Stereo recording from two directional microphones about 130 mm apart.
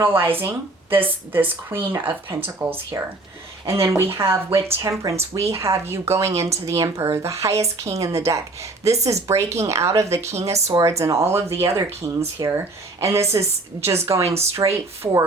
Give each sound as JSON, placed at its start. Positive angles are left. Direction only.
{"t": 0.3, "sound": "speech", "side_deg": -15}